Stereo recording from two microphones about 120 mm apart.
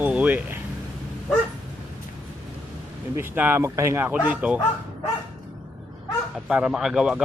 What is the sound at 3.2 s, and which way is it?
Speech, 15° right (ahead or behind).